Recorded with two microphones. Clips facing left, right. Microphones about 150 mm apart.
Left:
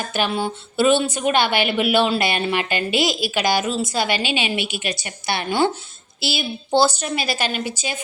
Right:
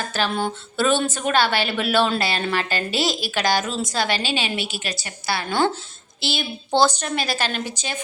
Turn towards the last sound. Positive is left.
turn(degrees=10)  # may be behind; listen again after turning